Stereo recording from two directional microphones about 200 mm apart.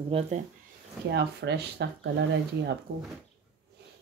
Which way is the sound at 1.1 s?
55° right (ahead or behind).